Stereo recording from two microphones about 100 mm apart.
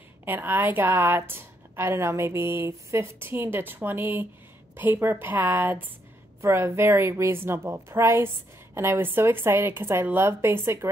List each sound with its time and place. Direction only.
0.2 s a woman's voice: 20° right (ahead or behind)